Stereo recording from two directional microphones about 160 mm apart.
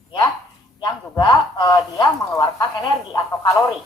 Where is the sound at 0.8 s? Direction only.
25° left (ahead or behind).